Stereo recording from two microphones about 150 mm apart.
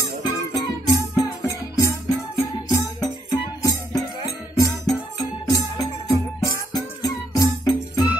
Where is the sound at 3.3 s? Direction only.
25° left (ahead or behind).